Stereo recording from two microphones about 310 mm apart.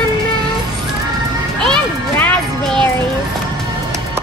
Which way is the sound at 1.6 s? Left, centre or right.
Centre.